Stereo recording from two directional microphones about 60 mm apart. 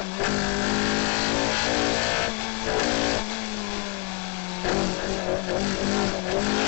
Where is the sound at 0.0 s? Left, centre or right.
Left.